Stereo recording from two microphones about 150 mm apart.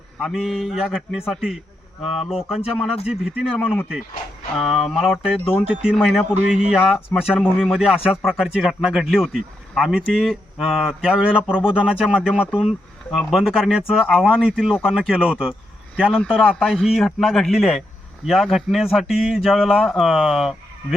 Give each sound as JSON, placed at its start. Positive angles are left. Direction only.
{"t": 0.3, "sound": "speech", "side_deg": 0}